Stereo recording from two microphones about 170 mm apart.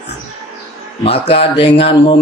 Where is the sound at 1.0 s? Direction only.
35° left (ahead or behind).